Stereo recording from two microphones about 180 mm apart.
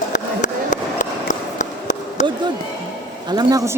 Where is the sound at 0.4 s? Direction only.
45° left (ahead or behind).